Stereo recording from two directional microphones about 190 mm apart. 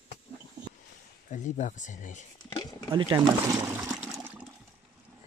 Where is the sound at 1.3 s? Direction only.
40° left (ahead or behind).